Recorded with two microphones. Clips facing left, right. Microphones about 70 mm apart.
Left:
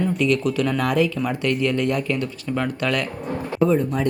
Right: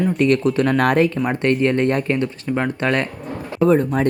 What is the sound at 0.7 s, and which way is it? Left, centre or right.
Speech, right.